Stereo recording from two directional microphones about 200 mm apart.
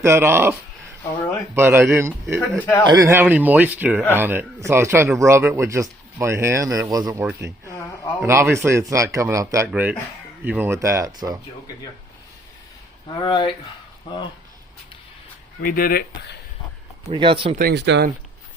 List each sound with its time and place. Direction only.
0.0 s speech: 15° right (ahead or behind)
1.1 s speech: 20° left (ahead or behind)
1.5 s speech: 10° right (ahead or behind)
13.1 s speech: 25° left (ahead or behind)
15.6 s speech: 45° left (ahead or behind)
17.1 s speech: 25° right (ahead or behind)
17.6 s speech: 55° right (ahead or behind)